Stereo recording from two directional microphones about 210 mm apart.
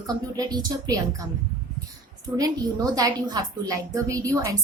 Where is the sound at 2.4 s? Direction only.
15° right (ahead or behind).